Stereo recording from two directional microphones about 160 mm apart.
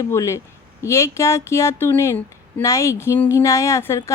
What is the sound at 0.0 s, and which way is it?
Speech, 20° left (ahead or behind).